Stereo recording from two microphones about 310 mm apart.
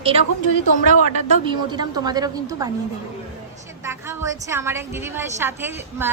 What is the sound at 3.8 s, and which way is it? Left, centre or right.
A woman's voice, centre.